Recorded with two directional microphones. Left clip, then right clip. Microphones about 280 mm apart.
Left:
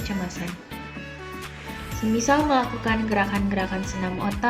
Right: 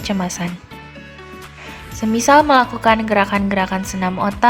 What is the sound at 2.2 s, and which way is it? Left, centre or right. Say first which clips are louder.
A woman's voice: right 10 dB; right.